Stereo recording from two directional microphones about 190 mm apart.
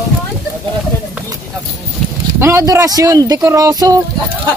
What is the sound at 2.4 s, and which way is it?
Speech, 15° right (ahead or behind).